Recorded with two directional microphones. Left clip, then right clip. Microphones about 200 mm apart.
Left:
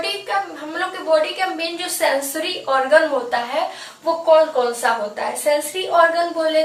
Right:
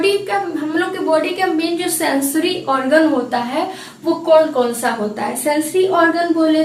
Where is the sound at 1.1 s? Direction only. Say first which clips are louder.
Even; centre (ahead or behind).